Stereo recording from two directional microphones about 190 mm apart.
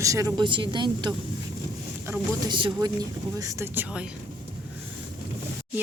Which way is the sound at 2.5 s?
25° right (ahead or behind).